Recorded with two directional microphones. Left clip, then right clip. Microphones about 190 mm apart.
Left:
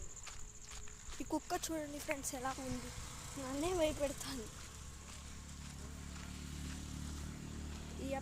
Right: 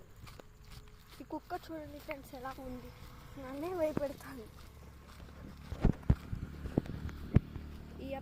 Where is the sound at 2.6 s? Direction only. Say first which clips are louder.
Left 1 dB; centre (ahead or behind).